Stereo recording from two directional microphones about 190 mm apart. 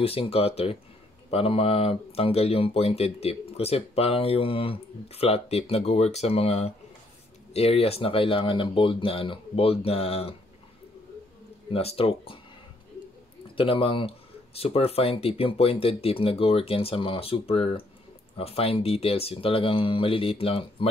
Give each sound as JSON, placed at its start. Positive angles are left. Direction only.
{"t": 0.0, "sound": "speech", "side_deg": 30}
{"t": 11.7, "sound": "speech", "side_deg": 30}
{"t": 13.6, "sound": "speech", "side_deg": 30}